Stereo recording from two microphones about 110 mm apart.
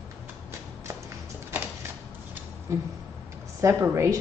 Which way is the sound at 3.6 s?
25° right (ahead or behind).